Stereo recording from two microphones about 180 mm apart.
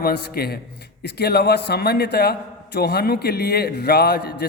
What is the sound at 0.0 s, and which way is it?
A man's voice, 60° left (ahead or behind).